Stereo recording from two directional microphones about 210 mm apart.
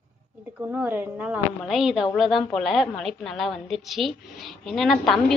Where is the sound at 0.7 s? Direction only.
5° right (ahead or behind).